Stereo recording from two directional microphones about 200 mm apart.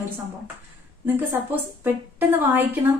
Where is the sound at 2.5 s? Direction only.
10° right (ahead or behind).